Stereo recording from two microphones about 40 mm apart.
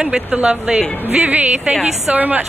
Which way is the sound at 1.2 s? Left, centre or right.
Right.